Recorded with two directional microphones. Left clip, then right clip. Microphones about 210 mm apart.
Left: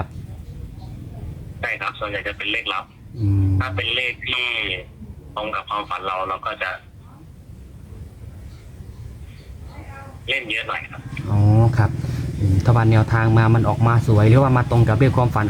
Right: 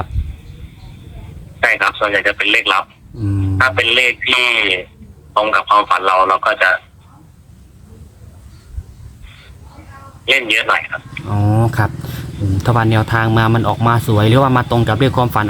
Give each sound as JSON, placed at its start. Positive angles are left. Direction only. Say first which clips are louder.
{"t": 1.6, "sound": "speech", "louder": "right 11 dB", "side_deg": -50}
{"t": 10.2, "sound": "a sound", "louder": "right 10 dB", "side_deg": -50}
{"t": 12.5, "sound": "speech", "louder": "right 5 dB", "side_deg": -40}